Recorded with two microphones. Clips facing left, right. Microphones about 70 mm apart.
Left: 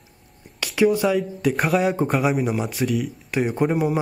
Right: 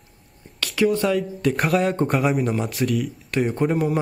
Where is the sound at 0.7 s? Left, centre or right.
Centre.